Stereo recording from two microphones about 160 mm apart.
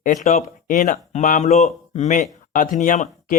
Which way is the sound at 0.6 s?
55° left (ahead or behind).